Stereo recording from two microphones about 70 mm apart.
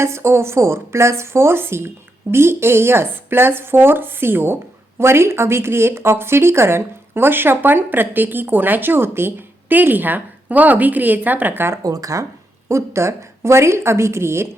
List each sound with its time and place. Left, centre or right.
0.0 s speech: right
11.8 s speech: right
12.6 s speech: right